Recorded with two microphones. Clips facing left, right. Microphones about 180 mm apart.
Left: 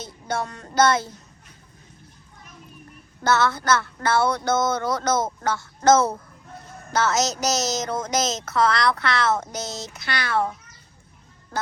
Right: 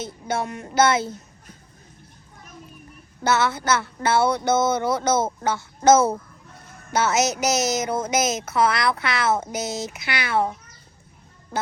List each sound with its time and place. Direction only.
0.0 s speech: 20° right (ahead or behind)
3.2 s speech: 20° right (ahead or behind)
7.3 s speech: 60° right (ahead or behind)
7.9 s speech: 20° right (ahead or behind)